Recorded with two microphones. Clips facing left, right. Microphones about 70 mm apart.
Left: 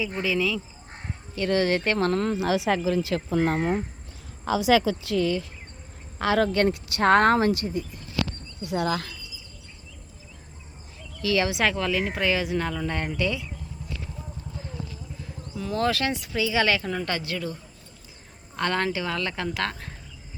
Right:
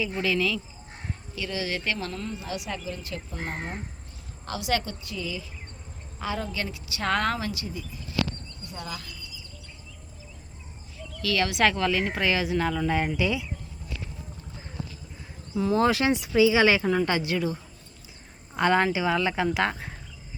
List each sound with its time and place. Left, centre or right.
0.2 s speech: centre
1.4 s speech: left
2.3 s speech: left
5.0 s speech: left
6.1 s speech: left
8.6 s speech: left
11.2 s speech: centre
11.6 s speech: centre
15.5 s speech: centre